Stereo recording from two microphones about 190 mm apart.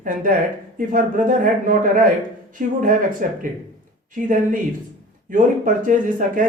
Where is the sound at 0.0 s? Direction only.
45° right (ahead or behind).